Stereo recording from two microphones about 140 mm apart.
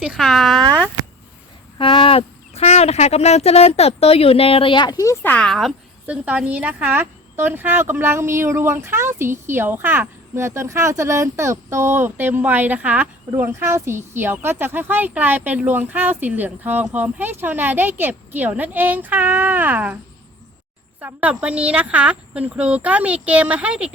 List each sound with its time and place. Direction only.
0.0 s speech: 5° right (ahead or behind)
1.8 s speech: 40° left (ahead or behind)
5.2 s a woman's voice: 10° left (ahead or behind); by 20.0 s 10° right (ahead or behind)
21.0 s a woman's voice: 10° right (ahead or behind)